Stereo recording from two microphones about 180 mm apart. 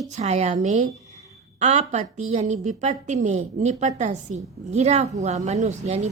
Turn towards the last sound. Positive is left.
turn(degrees=-40)  # may be behind; listen again after turning